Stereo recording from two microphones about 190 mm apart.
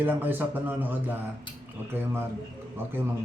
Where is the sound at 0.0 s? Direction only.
10° right (ahead or behind).